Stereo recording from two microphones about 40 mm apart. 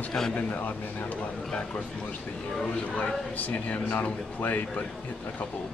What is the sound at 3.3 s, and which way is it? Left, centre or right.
Speech, left.